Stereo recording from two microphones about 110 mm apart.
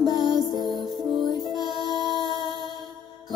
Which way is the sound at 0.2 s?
40° right (ahead or behind).